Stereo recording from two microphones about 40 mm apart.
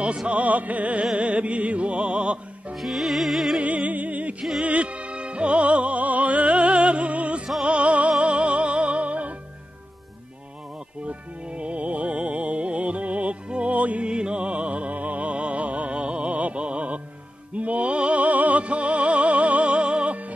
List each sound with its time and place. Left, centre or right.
0.3 s music: right
2.7 s music: centre
3.6 s music: right
11.1 s music: right
14.0 s music: right